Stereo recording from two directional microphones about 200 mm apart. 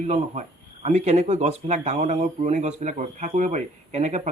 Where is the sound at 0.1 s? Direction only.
35° right (ahead or behind).